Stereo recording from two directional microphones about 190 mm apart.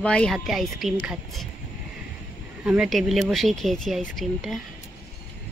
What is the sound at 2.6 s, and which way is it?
Speech, 5° right (ahead or behind).